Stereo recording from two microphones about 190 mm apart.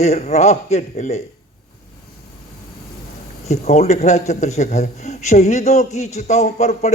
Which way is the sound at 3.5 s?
35° left (ahead or behind).